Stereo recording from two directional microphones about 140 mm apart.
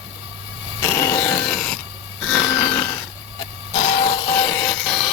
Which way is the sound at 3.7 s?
55° left (ahead or behind).